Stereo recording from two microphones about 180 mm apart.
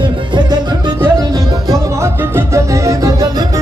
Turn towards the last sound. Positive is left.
turn(degrees=-15)  # may be behind; listen again after turning